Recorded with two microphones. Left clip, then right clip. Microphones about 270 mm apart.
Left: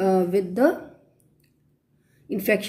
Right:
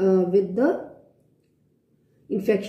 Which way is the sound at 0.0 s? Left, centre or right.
Left.